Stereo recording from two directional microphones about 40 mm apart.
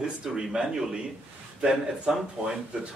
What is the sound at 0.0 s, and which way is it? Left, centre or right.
Speech, centre.